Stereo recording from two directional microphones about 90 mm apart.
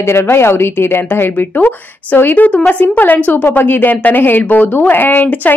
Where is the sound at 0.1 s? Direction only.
30° left (ahead or behind).